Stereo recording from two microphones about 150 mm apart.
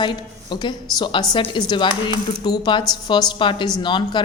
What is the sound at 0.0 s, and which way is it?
A woman's voice, 30° left (ahead or behind).